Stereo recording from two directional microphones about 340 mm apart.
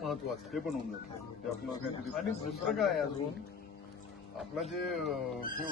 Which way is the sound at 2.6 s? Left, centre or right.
Centre.